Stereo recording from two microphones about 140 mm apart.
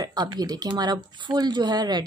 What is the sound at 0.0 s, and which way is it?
Speech, 30° right (ahead or behind).